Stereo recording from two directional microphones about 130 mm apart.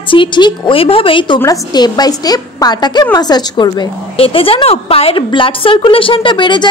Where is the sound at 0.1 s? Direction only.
40° left (ahead or behind).